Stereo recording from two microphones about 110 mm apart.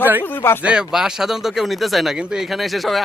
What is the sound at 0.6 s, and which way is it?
Speech, 5° right (ahead or behind).